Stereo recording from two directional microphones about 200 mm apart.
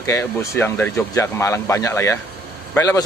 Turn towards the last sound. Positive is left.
turn(degrees=15)  # may be behind; listen again after turning